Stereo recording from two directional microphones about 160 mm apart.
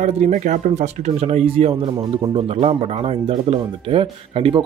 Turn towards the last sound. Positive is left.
turn(degrees=-35)  # may be behind; listen again after turning